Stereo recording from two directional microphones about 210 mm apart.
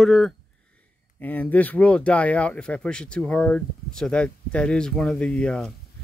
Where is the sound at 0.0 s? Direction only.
Centre (ahead or behind).